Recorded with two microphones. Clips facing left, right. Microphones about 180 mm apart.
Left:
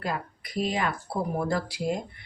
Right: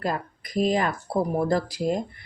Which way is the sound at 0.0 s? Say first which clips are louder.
Right 4 dB; 45° right (ahead or behind).